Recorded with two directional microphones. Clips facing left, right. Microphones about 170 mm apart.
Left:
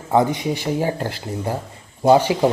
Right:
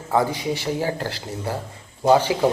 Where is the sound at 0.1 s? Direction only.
20° left (ahead or behind).